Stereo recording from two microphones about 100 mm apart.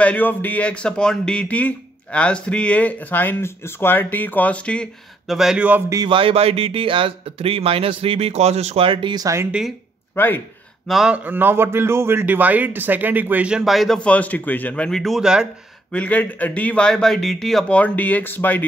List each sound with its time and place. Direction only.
0.0 s speech: 15° left (ahead or behind)
5.3 s speech: 5° right (ahead or behind)
6.0 s speech: 60° right (ahead or behind)
9.1 s speech: 35° right (ahead or behind)
9.5 s speech: 5° right (ahead or behind)
10.1 s speech: 20° left (ahead or behind)
10.9 s speech: centre (ahead or behind)
11.2 s speech: 20° right (ahead or behind)
15.9 s speech: 15° left (ahead or behind)
17.7 s speech: 15° left (ahead or behind)